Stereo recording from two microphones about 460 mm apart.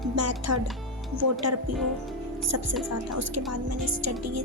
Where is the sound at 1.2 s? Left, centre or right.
Right.